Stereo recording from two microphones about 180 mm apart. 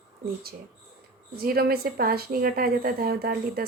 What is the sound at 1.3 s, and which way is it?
A woman's voice, 55° right (ahead or behind).